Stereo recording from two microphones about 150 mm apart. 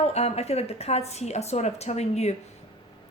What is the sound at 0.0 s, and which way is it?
A woman's voice, 45° left (ahead or behind).